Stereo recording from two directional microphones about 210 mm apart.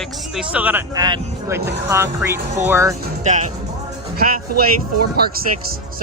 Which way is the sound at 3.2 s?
35° right (ahead or behind).